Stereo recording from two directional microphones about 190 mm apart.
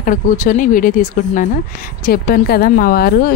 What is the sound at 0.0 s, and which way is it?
A woman's voice, 45° left (ahead or behind).